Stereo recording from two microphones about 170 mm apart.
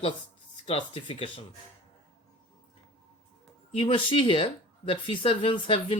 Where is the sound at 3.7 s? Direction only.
30° left (ahead or behind).